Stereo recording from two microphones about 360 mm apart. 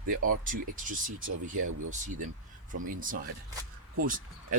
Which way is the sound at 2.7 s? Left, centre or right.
Right.